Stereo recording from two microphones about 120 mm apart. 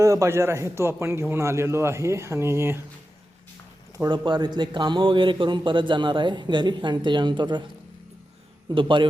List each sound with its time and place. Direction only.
0.0 s a man's voice: 25° right (ahead or behind)
4.3 s a man's voice: 35° right (ahead or behind)
8.7 s a man's voice: 45° right (ahead or behind)